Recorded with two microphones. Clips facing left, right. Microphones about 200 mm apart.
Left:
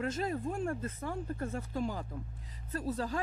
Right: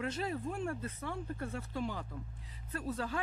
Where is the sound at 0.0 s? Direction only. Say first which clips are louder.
Left 3 dB; 45° left (ahead or behind).